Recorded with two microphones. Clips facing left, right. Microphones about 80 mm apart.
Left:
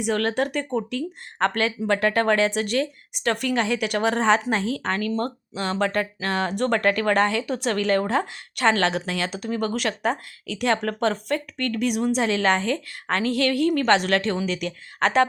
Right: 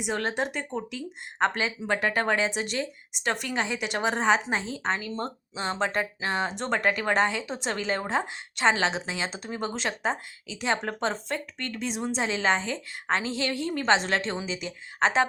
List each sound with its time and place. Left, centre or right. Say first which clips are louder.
0.0 s speech: left 5 dB; centre